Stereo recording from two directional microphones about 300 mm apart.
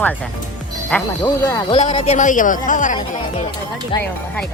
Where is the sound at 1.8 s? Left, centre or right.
Left.